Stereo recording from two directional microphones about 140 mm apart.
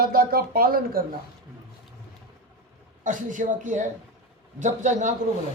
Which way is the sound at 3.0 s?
65° right (ahead or behind).